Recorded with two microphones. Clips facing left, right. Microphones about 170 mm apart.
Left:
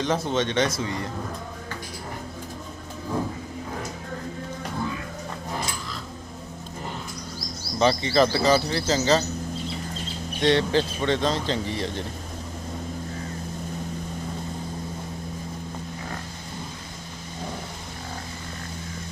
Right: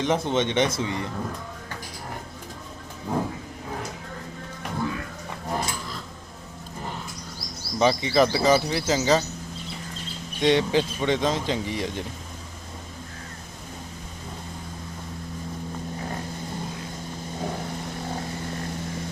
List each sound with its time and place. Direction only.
0.0 s speech: 20° right (ahead or behind)
7.8 s speech: 10° right (ahead or behind)
10.4 s speech: 15° right (ahead or behind)